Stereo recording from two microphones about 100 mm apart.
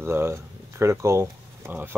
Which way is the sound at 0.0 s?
25° right (ahead or behind).